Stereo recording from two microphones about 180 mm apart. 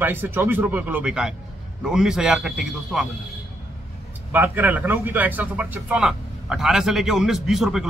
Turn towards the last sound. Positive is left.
turn(degrees=0)  # may be behind; listen again after turning